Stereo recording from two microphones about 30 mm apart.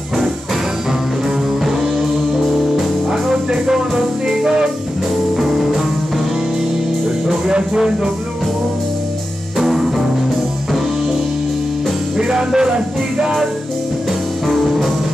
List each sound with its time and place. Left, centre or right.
1.6 s music: centre
3.1 s music: right
5.4 s music: centre
9.6 s music: centre
12.2 s music: right
14.5 s music: centre